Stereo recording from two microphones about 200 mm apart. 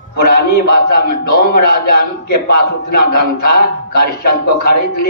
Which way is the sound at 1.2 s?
50° left (ahead or behind).